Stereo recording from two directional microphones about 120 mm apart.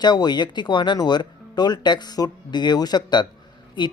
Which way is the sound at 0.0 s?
35° left (ahead or behind).